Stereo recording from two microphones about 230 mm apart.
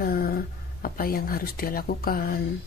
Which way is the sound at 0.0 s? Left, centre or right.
Left.